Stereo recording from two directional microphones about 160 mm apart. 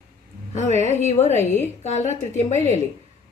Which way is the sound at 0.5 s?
45° left (ahead or behind).